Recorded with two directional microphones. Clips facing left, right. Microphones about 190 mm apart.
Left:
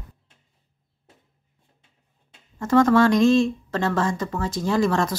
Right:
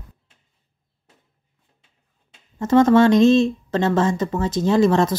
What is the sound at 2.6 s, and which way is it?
Speech, 25° right (ahead or behind).